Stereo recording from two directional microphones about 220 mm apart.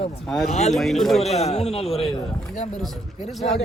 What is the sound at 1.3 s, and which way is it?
Speech, 30° left (ahead or behind).